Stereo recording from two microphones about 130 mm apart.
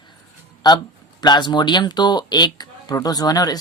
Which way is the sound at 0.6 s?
35° left (ahead or behind).